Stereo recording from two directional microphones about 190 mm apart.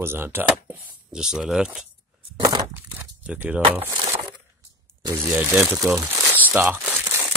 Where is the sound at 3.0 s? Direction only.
10° right (ahead or behind).